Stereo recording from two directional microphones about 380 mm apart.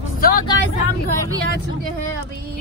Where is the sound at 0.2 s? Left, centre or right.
Left.